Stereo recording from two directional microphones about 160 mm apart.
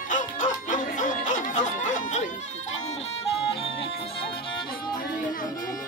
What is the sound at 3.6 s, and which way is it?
Music, 35° left (ahead or behind).